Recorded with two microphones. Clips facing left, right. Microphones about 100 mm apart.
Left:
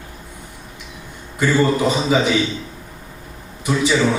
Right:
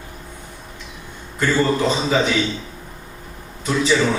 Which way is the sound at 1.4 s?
15° left (ahead or behind).